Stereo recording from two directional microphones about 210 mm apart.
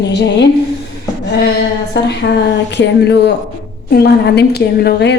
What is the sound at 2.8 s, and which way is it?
A woman's voice, 55° left (ahead or behind).